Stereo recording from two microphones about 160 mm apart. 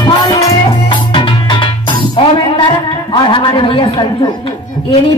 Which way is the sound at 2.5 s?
30° left (ahead or behind).